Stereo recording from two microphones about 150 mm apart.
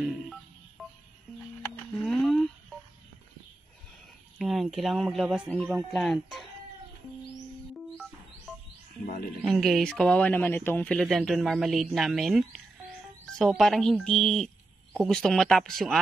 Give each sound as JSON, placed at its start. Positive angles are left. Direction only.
{"t": 0.1, "sound": "telephone dialing", "side_deg": 0}
{"t": 2.0, "sound": "a sound", "side_deg": 0}
{"t": 4.4, "sound": "speech", "side_deg": -5}
{"t": 7.7, "sound": "music", "side_deg": 0}
{"t": 9.0, "sound": "speech", "side_deg": 70}
{"t": 9.5, "sound": "speech", "side_deg": 0}